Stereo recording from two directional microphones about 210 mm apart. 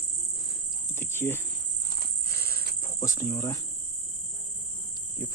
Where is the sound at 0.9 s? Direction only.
10° left (ahead or behind).